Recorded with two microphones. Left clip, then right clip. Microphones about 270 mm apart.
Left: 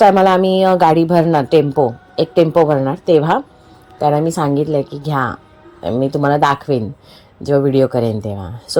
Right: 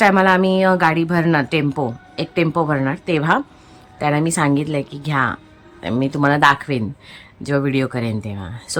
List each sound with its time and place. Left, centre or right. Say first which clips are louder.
0.0 s a woman's voice: left 4 dB; centre
2.1 s speech: left 8 dB; centre
2.4 s a woman's voice: left 6 dB; centre